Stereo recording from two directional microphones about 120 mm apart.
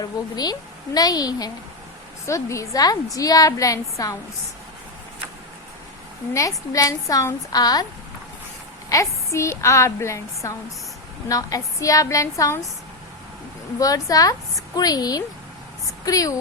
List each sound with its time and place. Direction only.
0.0 s a woman's voice: 35° left (ahead or behind)
6.3 s a woman's voice: 30° left (ahead or behind)
8.9 s a woman's voice: 25° left (ahead or behind)
13.7 s a woman's voice: 30° left (ahead or behind)